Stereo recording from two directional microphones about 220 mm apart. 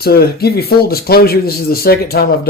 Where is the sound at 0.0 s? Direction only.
45° left (ahead or behind).